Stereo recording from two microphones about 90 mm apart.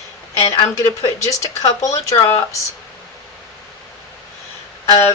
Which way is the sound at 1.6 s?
40° left (ahead or behind).